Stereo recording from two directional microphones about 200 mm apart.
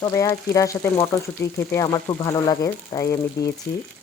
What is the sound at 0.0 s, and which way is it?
Speech, 15° left (ahead or behind).